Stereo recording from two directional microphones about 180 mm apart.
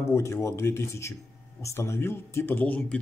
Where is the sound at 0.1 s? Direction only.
15° left (ahead or behind).